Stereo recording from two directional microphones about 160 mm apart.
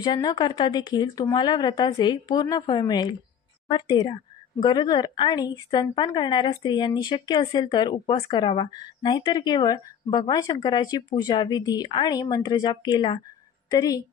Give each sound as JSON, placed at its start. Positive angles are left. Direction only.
{"t": 0.0, "sound": "a woman's voice", "side_deg": 25}